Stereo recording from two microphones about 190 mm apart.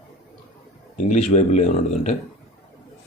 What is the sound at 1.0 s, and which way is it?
Speech, 40° left (ahead or behind).